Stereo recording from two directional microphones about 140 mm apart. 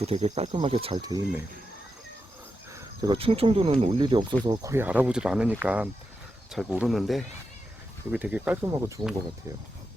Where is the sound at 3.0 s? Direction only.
40° right (ahead or behind).